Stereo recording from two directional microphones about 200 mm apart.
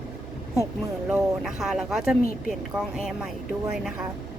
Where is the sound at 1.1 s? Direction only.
Centre (ahead or behind).